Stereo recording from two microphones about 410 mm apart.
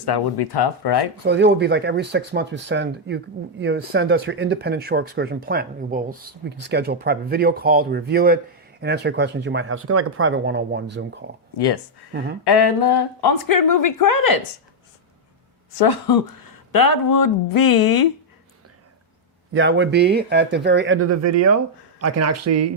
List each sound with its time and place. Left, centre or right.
0.0 s speech: left
1.2 s speech: right
11.5 s speech: left
15.8 s speech: left
19.5 s speech: right